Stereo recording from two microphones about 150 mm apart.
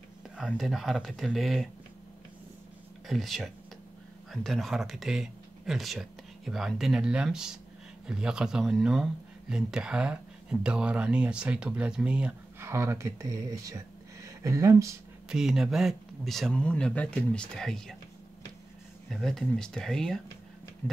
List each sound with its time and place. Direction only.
0.5 s speech: centre (ahead or behind)
3.1 s speech: centre (ahead or behind); by 15.0 s 20° right (ahead or behind)
15.2 s speech: 5° right (ahead or behind)
19.0 s speech: centre (ahead or behind)